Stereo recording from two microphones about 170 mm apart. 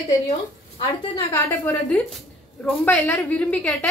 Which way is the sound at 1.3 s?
15° left (ahead or behind).